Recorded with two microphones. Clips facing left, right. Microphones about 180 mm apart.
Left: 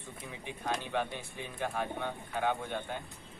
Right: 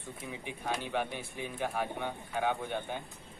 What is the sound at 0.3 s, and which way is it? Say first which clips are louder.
Speech: even; 10° right (ahead or behind).